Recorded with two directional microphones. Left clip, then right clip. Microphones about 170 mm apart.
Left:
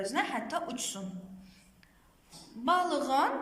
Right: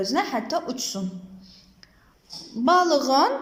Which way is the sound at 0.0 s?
35° right (ahead or behind).